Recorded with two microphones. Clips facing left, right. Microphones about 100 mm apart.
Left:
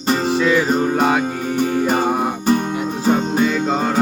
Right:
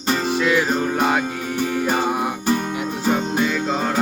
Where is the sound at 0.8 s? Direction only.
35° left (ahead or behind).